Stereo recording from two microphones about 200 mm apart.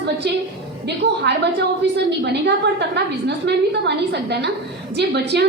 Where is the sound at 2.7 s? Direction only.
55° right (ahead or behind).